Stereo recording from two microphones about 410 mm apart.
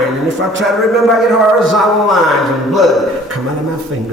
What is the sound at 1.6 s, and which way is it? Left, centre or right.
A man's voice, centre.